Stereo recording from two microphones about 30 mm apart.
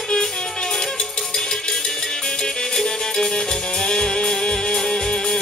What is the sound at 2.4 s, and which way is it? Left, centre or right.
Music, centre.